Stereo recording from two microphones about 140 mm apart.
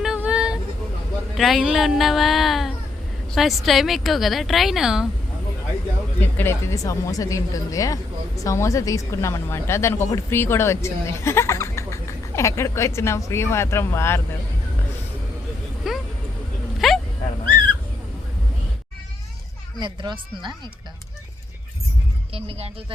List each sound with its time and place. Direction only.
0.2 s vehicle: 5° right (ahead or behind)
1.4 s a woman's voice: centre (ahead or behind)
6.1 s speech: 15° left (ahead or behind)
15.9 s vehicle: 5° right (ahead or behind)
16.8 s dog: centre (ahead or behind)
19.8 s speech: 35° right (ahead or behind)
22.3 s speech: 45° right (ahead or behind)